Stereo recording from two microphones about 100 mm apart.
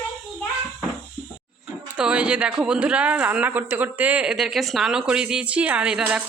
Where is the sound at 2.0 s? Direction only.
10° right (ahead or behind).